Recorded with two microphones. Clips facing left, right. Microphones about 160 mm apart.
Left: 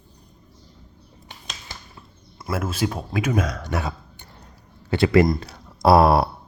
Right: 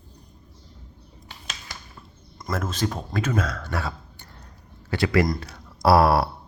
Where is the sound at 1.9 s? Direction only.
10° left (ahead or behind).